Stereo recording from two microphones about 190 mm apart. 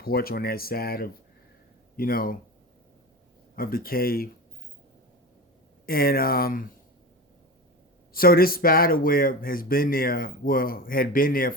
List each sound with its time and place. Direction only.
0.0 s speech: 50° left (ahead or behind)
3.5 s speech: 50° left (ahead or behind)
5.8 s speech: 50° left (ahead or behind)
8.1 s speech: 50° left (ahead or behind)